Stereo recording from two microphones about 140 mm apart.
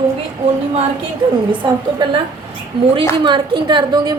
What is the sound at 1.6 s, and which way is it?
Speech, 35° right (ahead or behind).